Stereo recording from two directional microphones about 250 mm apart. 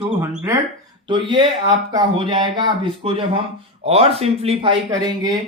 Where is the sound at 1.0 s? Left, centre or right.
Centre.